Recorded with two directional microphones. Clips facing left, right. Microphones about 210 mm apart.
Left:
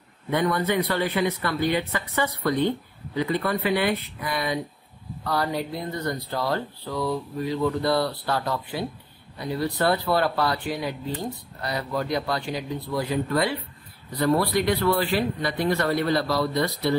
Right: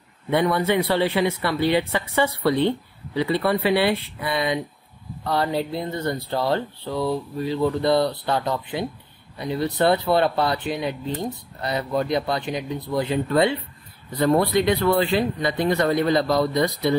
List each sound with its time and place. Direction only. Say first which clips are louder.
0.3 s speech: right 3 dB; 25° right (ahead or behind)
3.4 s speech: right 5 dB; 30° right (ahead or behind)